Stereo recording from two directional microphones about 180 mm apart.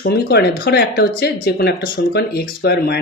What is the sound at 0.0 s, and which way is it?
Speech, 60° left (ahead or behind).